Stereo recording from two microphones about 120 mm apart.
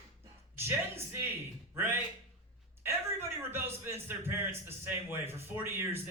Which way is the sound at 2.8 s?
20° right (ahead or behind).